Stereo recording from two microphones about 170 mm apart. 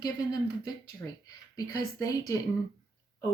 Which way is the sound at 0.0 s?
25° left (ahead or behind).